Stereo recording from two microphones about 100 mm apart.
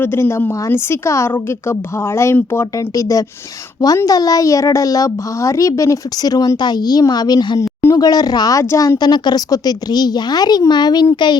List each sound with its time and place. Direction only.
0.0 s a woman's voice: 25° left (ahead or behind)
2.7 s speech: 35° left (ahead or behind)
9.0 s a woman's voice: 45° left (ahead or behind)